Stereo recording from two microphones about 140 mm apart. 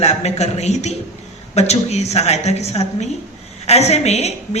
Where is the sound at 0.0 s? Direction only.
50° left (ahead or behind).